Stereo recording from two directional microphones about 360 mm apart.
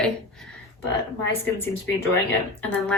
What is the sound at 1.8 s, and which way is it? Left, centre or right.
Speech, left.